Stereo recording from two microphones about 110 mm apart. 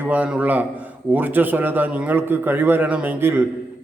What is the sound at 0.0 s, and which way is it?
A man's voice, 15° right (ahead or behind).